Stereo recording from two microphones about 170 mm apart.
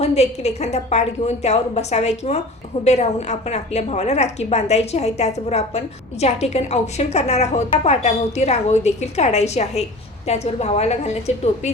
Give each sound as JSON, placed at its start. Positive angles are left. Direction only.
{"t": 0.0, "sound": "a woman's voice", "side_deg": 40}